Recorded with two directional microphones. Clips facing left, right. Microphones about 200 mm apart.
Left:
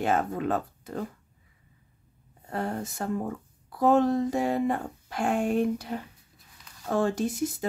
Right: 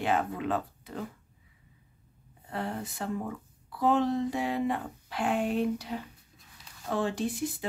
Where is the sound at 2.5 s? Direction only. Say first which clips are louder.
Left 3 dB; 45° left (ahead or behind).